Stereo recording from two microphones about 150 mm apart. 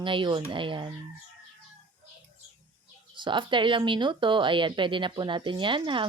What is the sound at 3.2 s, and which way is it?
Speech, 30° right (ahead or behind).